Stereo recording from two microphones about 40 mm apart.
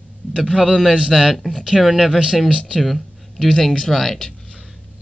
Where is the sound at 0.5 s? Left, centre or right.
Centre.